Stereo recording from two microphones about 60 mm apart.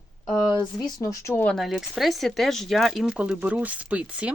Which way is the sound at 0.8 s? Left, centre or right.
Left.